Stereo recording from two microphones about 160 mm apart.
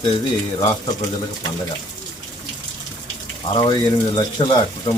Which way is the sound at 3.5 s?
30° left (ahead or behind).